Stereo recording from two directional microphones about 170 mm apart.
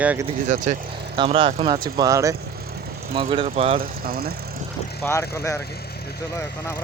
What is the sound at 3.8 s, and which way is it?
Speech, 60° right (ahead or behind).